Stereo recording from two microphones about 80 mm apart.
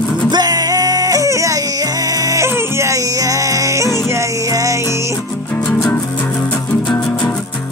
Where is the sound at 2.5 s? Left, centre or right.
Right.